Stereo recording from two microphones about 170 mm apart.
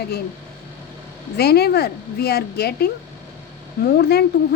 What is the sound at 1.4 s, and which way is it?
A woman's voice, 70° left (ahead or behind).